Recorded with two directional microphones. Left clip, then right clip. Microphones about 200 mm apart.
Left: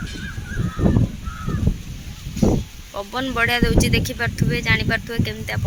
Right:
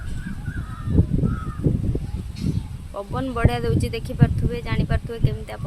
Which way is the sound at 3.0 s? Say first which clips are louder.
Left 5 dB; 5° right (ahead or behind).